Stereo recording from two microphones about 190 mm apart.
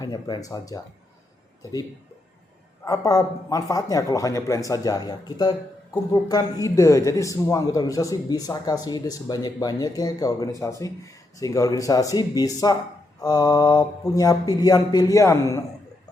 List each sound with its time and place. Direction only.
0.0 s a man's voice: 20° left (ahead or behind)
2.8 s a man's voice: 20° left (ahead or behind)